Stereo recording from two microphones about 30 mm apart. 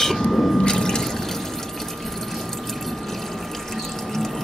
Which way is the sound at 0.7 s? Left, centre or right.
Centre.